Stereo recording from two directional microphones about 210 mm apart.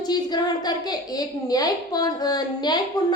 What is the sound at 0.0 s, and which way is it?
A woman's voice, 20° left (ahead or behind).